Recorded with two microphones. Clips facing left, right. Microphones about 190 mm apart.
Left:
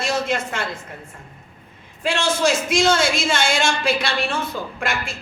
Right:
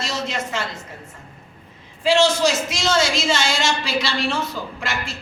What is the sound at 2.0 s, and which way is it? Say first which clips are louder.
A woman's voice: right 3 dB; 55° left (ahead or behind).